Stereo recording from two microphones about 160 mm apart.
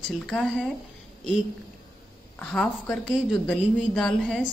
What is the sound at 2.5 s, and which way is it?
A woman's voice, 5° left (ahead or behind).